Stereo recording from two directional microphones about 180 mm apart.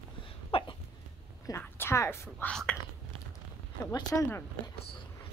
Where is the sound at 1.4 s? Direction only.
15° left (ahead or behind).